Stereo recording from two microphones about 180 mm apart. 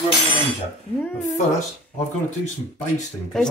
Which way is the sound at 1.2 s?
40° left (ahead or behind).